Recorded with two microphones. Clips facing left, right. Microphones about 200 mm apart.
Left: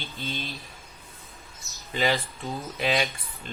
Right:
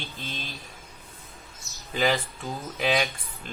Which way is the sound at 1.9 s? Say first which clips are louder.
Right 1 dB; centre (ahead or behind).